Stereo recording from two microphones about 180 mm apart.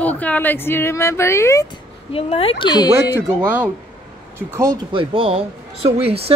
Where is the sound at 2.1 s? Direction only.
30° left (ahead or behind).